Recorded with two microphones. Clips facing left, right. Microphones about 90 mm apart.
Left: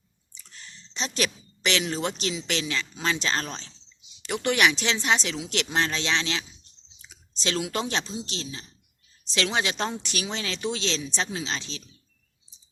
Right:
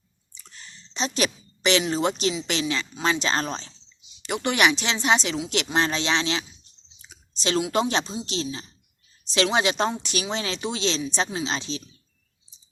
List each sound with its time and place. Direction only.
0.9 s a woman's voice: 15° right (ahead or behind)
7.7 s speech: 15° right (ahead or behind)